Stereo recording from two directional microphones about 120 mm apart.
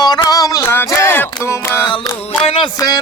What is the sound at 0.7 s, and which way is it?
Music, 20° left (ahead or behind).